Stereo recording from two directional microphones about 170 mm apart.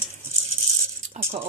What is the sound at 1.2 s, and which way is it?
Speech, 45° right (ahead or behind).